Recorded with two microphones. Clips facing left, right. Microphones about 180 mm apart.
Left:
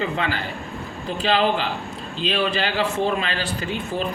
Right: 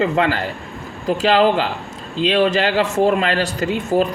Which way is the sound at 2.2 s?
90° right.